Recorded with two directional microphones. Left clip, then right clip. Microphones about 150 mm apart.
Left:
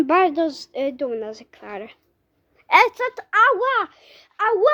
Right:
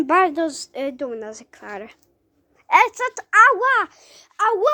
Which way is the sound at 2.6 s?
20° left (ahead or behind).